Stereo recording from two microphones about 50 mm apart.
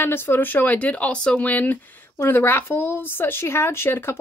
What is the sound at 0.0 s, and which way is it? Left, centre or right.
Speech, left.